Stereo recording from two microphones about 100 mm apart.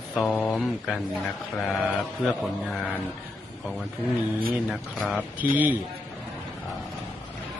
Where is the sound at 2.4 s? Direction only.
Centre (ahead or behind).